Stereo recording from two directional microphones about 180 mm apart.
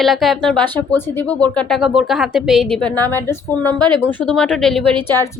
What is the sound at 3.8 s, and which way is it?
Speech, 25° right (ahead or behind).